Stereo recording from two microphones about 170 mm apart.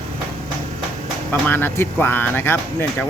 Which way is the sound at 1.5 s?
10° left (ahead or behind).